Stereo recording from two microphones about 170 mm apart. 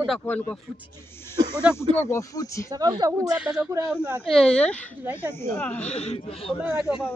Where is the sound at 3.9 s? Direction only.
10° right (ahead or behind).